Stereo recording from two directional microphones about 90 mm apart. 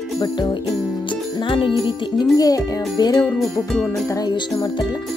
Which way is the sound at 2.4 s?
45° left (ahead or behind).